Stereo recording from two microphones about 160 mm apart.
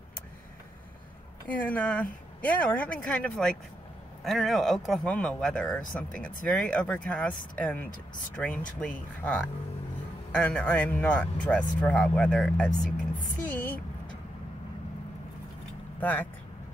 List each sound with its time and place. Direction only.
1.5 s speech: 10° left (ahead or behind)
13.5 s a sound: 10° left (ahead or behind)
16.0 s speech: 10° left (ahead or behind)